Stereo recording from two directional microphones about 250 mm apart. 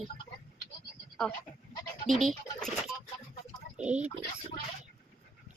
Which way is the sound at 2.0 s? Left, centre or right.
Centre.